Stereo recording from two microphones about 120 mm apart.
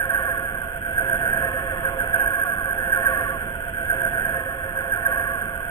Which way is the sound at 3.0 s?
30° left (ahead or behind).